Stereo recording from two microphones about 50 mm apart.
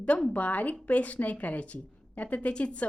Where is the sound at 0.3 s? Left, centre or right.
Left.